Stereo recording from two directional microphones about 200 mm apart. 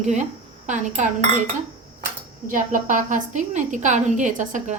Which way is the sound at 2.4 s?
40° right (ahead or behind).